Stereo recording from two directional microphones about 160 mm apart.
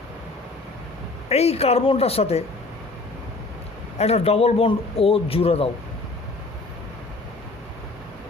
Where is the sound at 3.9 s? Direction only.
40° left (ahead or behind).